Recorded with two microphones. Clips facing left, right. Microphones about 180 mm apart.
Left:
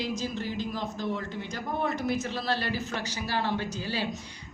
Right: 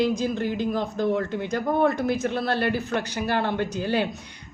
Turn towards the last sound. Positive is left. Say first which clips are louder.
# right 7 dB
turn(degrees=-60)  # may be behind; listen again after turning